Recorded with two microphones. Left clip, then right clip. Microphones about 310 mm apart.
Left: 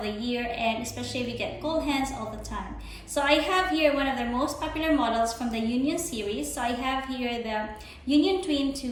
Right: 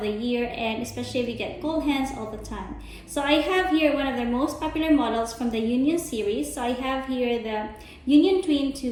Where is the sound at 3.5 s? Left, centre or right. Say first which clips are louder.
Right 2 dB; centre.